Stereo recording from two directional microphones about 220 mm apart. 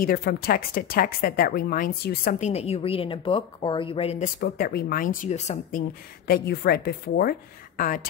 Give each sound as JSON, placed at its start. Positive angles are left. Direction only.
{"t": 0.0, "sound": "a woman's voice", "side_deg": 45}
{"t": 4.4, "sound": "a woman's voice", "side_deg": 40}